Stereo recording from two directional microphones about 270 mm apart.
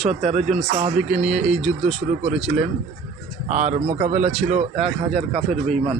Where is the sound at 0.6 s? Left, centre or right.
Right.